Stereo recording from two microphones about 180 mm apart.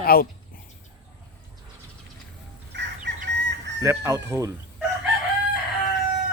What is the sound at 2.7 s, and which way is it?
Chicken, 75° right (ahead or behind).